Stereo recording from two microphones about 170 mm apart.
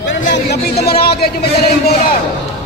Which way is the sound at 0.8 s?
65° left (ahead or behind).